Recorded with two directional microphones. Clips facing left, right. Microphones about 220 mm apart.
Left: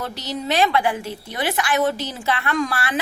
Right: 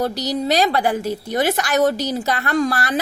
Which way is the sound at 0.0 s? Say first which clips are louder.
Right 7 dB; 40° right (ahead or behind).